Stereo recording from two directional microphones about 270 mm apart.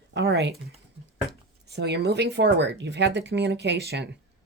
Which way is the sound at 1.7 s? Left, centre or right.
Right.